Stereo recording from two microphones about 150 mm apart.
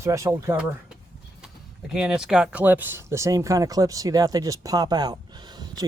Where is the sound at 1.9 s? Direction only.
5° right (ahead or behind).